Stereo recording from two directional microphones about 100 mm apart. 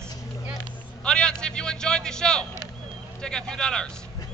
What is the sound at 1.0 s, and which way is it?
Speech, 10° left (ahead or behind).